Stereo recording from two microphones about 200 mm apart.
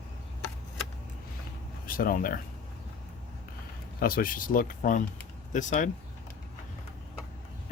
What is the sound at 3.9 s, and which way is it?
Speech, 45° left (ahead or behind).